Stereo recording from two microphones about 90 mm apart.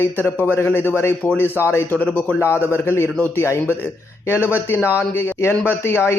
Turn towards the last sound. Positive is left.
turn(degrees=25)  # may be behind; listen again after turning